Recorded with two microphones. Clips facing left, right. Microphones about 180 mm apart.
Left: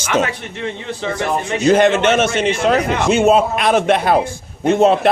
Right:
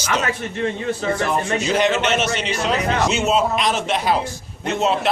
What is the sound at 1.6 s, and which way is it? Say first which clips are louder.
A man's voice: left 10 dB; 50° left (ahead or behind).